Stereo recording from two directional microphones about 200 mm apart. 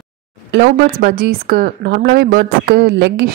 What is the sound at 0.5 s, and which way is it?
Speech, 50° right (ahead or behind).